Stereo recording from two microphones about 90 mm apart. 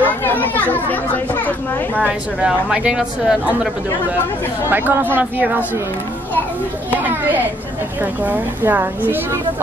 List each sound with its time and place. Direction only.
0.0 s speech: 20° left (ahead or behind)
2.0 s a woman's voice: 15° right (ahead or behind)
4.6 s a woman's voice: 25° right (ahead or behind)
6.9 s speech: 20° right (ahead or behind)